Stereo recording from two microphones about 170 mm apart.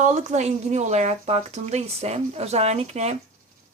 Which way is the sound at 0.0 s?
40° right (ahead or behind).